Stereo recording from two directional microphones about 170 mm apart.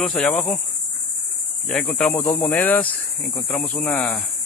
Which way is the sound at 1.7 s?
5° left (ahead or behind).